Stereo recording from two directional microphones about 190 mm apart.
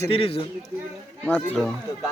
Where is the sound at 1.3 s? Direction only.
5° left (ahead or behind).